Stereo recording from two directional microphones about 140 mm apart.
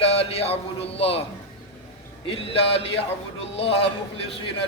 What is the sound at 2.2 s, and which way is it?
A man's voice, 45° left (ahead or behind).